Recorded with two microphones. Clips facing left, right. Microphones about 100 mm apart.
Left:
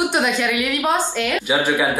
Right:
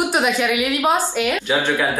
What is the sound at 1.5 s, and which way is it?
Speech, 15° left (ahead or behind).